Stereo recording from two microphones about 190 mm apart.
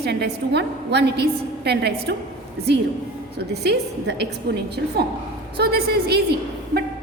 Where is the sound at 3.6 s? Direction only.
60° right (ahead or behind).